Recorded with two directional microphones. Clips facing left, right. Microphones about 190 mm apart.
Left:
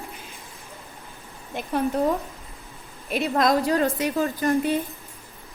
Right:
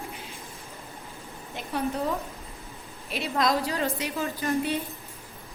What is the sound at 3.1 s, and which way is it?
A woman's voice, 50° left (ahead or behind).